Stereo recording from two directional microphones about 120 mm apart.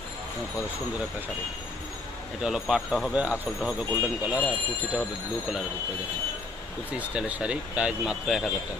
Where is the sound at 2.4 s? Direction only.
5° right (ahead or behind).